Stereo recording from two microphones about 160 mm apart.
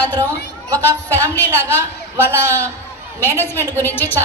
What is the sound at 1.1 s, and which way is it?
Speech, 10° left (ahead or behind).